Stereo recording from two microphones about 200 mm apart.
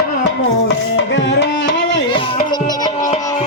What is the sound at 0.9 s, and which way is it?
Music, 65° left (ahead or behind).